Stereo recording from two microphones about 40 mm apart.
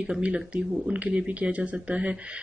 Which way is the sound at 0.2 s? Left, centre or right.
Right.